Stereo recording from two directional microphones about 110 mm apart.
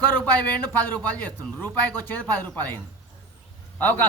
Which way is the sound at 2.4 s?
15° left (ahead or behind).